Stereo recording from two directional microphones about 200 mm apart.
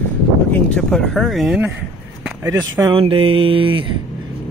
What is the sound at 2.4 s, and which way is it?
Speech, 15° right (ahead or behind).